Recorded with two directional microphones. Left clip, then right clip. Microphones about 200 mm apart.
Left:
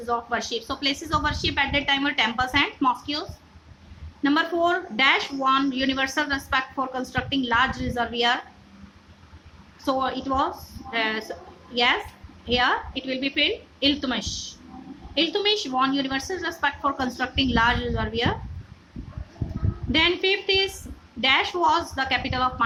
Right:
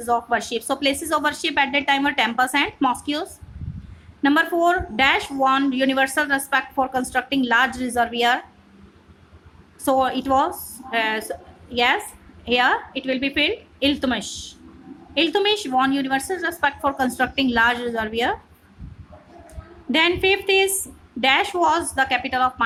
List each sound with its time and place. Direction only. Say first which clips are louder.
0.0 s speech: right 5 dB; 25° right (ahead or behind)
9.8 s a woman's voice: right 5 dB; 25° right (ahead or behind)
19.9 s speech: right 3 dB; 25° right (ahead or behind)